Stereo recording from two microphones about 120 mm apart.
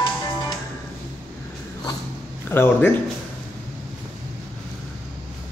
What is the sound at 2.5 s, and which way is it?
Speech, 20° left (ahead or behind).